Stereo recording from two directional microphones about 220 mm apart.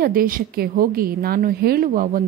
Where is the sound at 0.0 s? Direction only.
40° right (ahead or behind).